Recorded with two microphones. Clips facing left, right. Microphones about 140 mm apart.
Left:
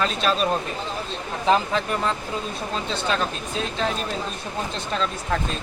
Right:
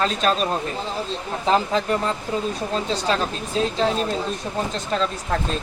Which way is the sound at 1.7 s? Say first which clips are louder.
Right 2 dB; 35° right (ahead or behind).